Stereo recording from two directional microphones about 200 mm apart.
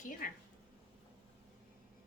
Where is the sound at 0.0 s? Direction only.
40° left (ahead or behind).